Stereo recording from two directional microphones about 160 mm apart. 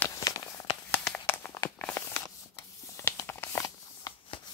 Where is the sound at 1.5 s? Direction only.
20° left (ahead or behind).